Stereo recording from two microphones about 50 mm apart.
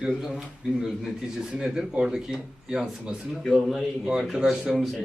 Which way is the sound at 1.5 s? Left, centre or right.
Centre.